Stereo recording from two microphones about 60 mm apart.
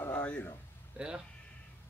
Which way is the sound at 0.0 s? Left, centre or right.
Left.